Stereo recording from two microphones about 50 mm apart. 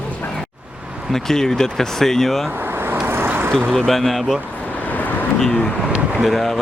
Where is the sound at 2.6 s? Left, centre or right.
Right.